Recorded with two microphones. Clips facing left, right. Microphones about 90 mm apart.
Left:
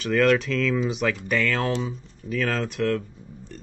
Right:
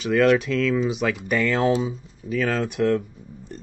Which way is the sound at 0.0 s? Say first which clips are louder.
Right 2 dB; centre (ahead or behind).